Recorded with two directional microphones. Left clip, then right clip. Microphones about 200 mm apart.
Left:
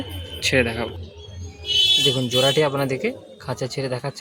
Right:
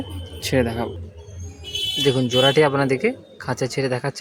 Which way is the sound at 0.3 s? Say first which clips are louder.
Left 2 dB; 30° right (ahead or behind).